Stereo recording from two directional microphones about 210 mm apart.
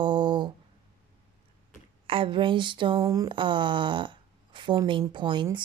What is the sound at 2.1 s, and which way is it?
Speech, 25° right (ahead or behind).